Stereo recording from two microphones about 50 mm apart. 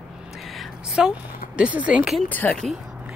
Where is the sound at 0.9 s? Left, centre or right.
Centre.